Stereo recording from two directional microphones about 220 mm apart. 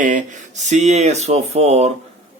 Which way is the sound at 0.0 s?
35° right (ahead or behind).